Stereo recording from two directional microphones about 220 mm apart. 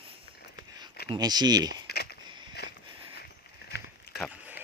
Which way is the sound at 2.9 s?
20° right (ahead or behind).